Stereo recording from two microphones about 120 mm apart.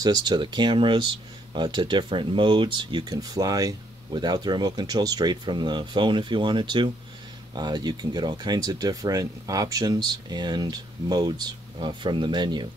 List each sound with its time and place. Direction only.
0.0 s speech: 35° right (ahead or behind)